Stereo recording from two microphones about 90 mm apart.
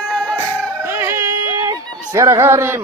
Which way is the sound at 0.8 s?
25° right (ahead or behind).